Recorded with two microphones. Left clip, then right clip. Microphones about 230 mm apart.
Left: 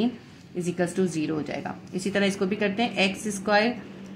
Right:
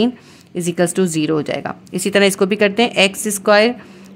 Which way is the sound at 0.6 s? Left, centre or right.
Right.